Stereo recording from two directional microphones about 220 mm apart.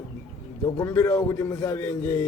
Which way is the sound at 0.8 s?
15° left (ahead or behind).